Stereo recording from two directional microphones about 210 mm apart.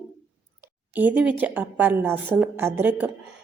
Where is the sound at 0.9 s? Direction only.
5° right (ahead or behind).